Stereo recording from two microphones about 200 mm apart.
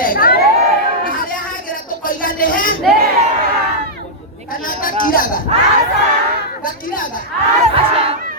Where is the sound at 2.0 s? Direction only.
45° left (ahead or behind).